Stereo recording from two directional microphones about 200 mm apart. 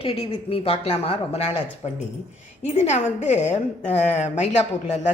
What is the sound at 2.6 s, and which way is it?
A woman's voice, 35° left (ahead or behind).